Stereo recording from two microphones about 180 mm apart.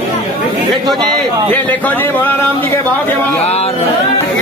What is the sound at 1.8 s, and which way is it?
Speech, 10° left (ahead or behind).